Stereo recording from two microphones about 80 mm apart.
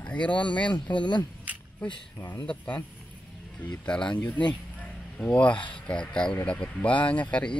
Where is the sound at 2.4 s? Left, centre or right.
Centre.